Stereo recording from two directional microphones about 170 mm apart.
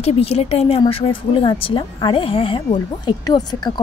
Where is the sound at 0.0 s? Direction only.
35° left (ahead or behind).